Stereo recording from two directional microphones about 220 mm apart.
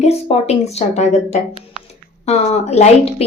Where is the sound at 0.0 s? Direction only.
30° left (ahead or behind).